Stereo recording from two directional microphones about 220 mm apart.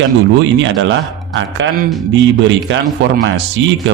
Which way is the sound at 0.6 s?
55° right (ahead or behind).